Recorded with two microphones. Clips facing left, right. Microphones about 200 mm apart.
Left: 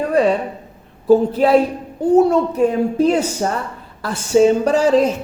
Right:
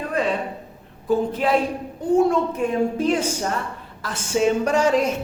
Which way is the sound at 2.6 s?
40° left (ahead or behind).